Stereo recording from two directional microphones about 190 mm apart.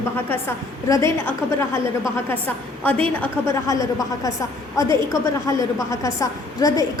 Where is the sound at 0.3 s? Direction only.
15° left (ahead or behind).